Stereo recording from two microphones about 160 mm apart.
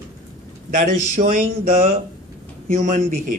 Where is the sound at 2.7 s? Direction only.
50° right (ahead or behind).